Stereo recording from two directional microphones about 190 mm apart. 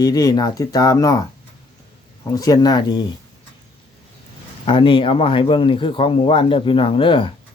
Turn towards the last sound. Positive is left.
turn(degrees=25)  # may be behind; listen again after turning